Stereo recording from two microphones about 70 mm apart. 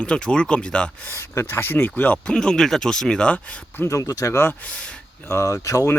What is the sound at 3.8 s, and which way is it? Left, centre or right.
Speech, left.